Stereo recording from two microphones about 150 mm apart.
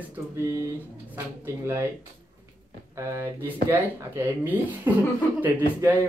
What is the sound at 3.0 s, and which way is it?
Speech, 15° right (ahead or behind).